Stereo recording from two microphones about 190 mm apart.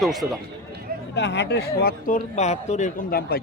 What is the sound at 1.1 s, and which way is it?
Speech, 65° left (ahead or behind).